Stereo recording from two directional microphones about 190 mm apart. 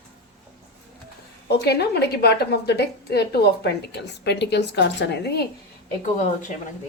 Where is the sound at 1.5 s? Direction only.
60° left (ahead or behind).